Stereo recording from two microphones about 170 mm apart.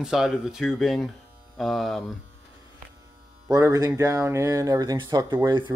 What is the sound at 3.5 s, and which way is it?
Speech, 20° right (ahead or behind).